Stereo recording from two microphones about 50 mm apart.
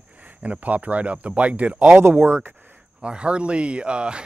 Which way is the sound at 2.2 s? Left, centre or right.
Right.